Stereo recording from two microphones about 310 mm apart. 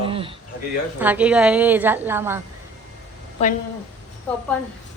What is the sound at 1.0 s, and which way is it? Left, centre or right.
A woman's voice, centre.